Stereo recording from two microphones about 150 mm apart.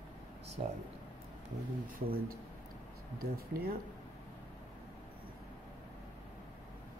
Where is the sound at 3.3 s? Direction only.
90° right.